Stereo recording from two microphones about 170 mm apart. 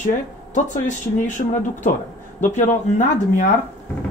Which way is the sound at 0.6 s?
45° left (ahead or behind).